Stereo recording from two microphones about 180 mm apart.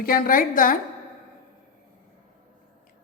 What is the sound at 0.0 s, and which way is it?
Speech, 55° left (ahead or behind).